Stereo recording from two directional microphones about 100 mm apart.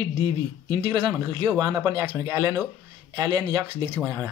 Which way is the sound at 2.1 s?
25° right (ahead or behind).